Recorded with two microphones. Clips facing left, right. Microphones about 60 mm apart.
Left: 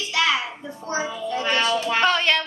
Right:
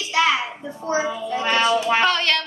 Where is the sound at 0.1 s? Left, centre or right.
Right.